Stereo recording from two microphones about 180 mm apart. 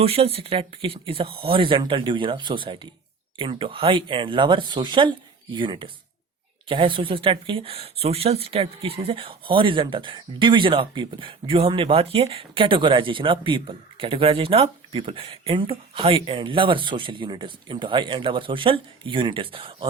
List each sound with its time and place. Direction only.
0.0 s speech: 30° right (ahead or behind)